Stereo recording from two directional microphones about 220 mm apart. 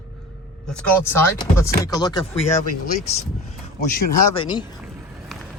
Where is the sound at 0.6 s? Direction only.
10° left (ahead or behind).